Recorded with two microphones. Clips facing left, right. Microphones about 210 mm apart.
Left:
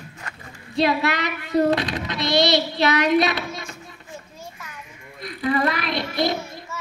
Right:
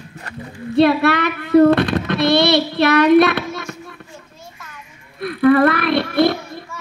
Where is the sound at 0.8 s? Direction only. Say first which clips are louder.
Right 7 dB; 60° right (ahead or behind).